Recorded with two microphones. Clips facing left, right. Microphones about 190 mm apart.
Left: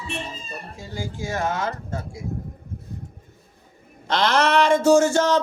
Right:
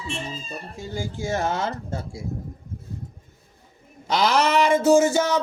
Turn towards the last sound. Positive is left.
turn(degrees=-5)  # may be behind; listen again after turning